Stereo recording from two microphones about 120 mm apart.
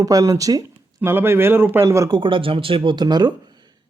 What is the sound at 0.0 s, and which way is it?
Speech, 30° right (ahead or behind).